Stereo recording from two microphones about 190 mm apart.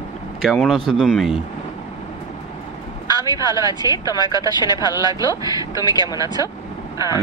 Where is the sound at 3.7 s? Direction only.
20° right (ahead or behind).